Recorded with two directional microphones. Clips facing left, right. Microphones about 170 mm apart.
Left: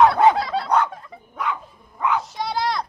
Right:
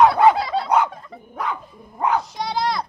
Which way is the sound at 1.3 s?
40° right (ahead or behind).